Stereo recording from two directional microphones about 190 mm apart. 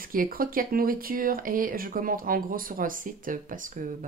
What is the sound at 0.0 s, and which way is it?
Speech, 50° right (ahead or behind).